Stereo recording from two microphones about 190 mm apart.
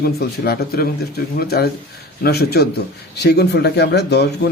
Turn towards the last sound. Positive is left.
turn(degrees=60)  # may be behind; listen again after turning